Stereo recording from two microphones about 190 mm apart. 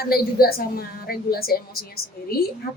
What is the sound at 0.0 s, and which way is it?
A woman's voice, 55° left (ahead or behind).